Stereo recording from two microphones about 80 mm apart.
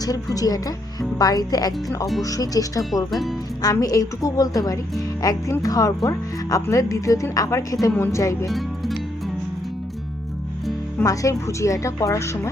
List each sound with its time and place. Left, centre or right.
0.0 s speech: left
3.1 s speech: centre
3.6 s a woman's voice: left
8.4 s speech: centre
11.0 s a woman's voice: left